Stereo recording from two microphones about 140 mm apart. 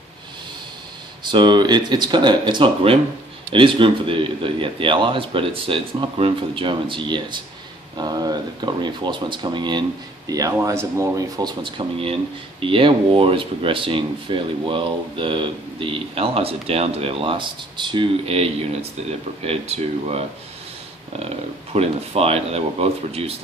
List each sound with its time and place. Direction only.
1.2 s speech: 35° right (ahead or behind)
21.7 s speech: 45° right (ahead or behind)